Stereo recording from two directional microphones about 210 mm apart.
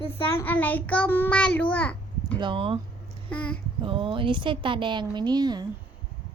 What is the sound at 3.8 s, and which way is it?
A woman's voice, 25° right (ahead or behind).